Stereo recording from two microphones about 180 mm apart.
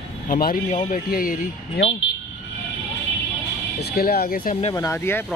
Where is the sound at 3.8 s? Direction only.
55° left (ahead or behind).